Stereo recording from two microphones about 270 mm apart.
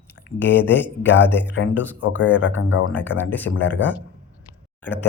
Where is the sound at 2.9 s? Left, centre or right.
Centre.